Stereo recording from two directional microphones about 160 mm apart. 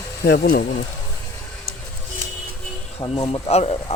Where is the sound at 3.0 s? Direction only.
35° left (ahead or behind).